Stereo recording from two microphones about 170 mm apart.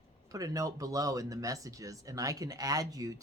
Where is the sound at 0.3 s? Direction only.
20° right (ahead or behind).